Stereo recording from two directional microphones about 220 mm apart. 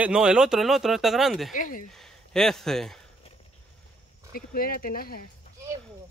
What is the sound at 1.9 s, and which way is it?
Speech, centre (ahead or behind).